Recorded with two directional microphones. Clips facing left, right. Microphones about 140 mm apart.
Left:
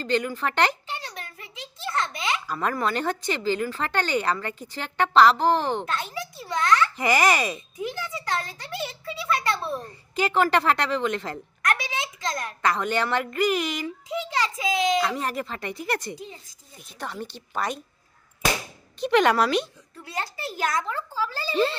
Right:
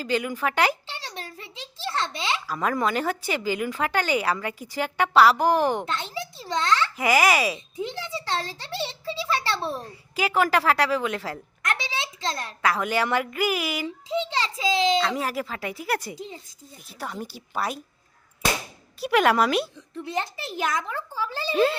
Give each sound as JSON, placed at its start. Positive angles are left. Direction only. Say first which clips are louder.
{"t": 0.0, "sound": "speech", "louder": "even", "side_deg": -5}
{"t": 0.9, "sound": "a sound", "louder": "left 1 dB", "side_deg": -30}
{"t": 2.5, "sound": "a woman's voice", "louder": "right 2 dB", "side_deg": -5}
{"t": 5.8, "sound": "a sound", "louder": "even", "side_deg": -25}
{"t": 6.9, "sound": "a woman's voice", "louder": "right 1 dB", "side_deg": -5}
{"t": 7.8, "sound": "a sound", "louder": "even", "side_deg": -25}
{"t": 10.2, "sound": "a woman's voice", "louder": "left 1 dB", "side_deg": -5}
{"t": 11.6, "sound": "a sound", "louder": "left 2 dB", "side_deg": -25}
{"t": 12.6, "sound": "speech", "louder": "right 1 dB", "side_deg": -5}
{"t": 13.8, "sound": "a child's voice", "louder": "right 3 dB", "side_deg": -30}
{"t": 15.1, "sound": "a woman's voice", "louder": "right 1 dB", "side_deg": -5}
{"t": 18.9, "sound": "a woman's voice", "louder": "even", "side_deg": -5}
{"t": 20.7, "sound": "a child's voice", "louder": "left 2 dB", "side_deg": -15}
{"t": 21.5, "sound": "speech", "louder": "right 3 dB", "side_deg": -5}